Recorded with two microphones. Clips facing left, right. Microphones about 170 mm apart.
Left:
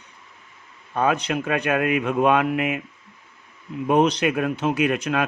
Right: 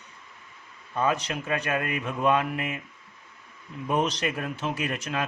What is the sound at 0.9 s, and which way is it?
Speech, 65° left (ahead or behind).